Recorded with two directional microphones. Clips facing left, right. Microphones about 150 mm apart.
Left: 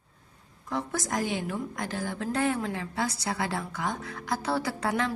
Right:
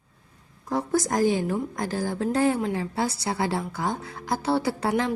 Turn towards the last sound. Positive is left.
turn(degrees=-30)  # may be behind; listen again after turning